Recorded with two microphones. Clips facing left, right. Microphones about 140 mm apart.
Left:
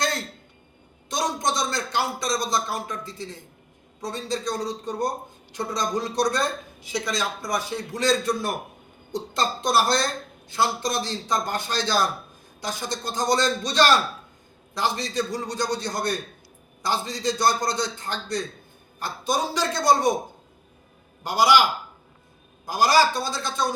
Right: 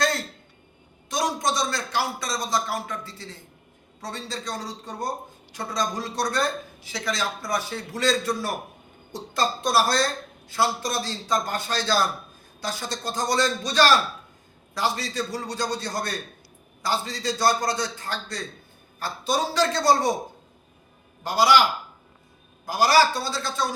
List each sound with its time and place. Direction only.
1.1 s a man's voice: 20° left (ahead or behind)
21.2 s a man's voice: 15° left (ahead or behind)
22.7 s a man's voice: 15° left (ahead or behind)